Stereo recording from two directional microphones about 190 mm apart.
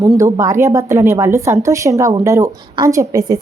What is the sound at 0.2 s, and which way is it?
A woman's voice, 15° right (ahead or behind).